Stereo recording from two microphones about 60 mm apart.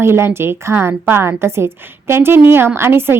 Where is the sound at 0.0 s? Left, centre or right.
Right.